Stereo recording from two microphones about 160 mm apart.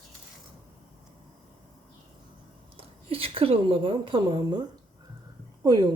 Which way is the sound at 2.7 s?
35° right (ahead or behind).